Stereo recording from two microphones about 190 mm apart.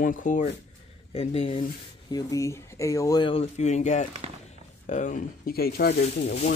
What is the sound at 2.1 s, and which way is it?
Speech, 15° left (ahead or behind).